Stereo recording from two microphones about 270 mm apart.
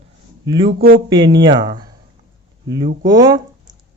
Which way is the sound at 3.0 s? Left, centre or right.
Centre.